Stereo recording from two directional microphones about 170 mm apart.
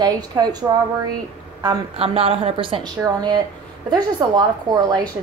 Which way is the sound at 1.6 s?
30° right (ahead or behind).